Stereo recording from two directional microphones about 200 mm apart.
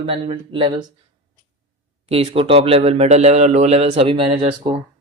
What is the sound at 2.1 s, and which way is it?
A man's voice, 30° right (ahead or behind).